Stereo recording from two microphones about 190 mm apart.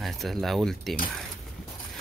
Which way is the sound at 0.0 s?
Centre (ahead or behind).